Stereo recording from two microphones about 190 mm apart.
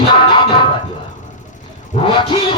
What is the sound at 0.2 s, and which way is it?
Music, 25° left (ahead or behind).